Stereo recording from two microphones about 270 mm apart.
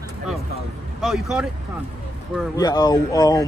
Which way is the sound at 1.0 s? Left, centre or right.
Centre.